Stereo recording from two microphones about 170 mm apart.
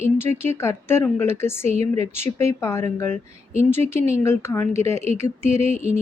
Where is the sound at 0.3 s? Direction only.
15° left (ahead or behind).